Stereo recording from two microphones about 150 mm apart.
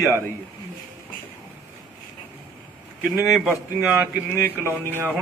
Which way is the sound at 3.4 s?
10° right (ahead or behind).